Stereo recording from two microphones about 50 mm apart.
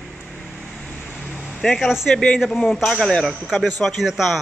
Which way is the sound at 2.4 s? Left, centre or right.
Centre.